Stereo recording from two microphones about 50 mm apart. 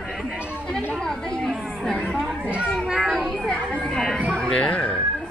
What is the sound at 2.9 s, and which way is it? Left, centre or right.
Children playing, centre.